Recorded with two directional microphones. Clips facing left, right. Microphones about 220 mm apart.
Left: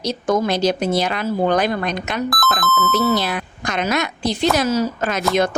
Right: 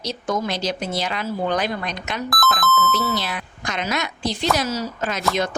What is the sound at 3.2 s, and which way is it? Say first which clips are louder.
A woman's voice: left 5 dB; 60° left (ahead or behind).